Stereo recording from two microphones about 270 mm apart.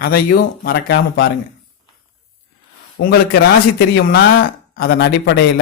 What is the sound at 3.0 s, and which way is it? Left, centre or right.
Speech, left.